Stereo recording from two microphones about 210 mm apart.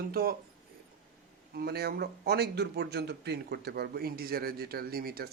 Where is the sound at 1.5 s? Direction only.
50° right (ahead or behind).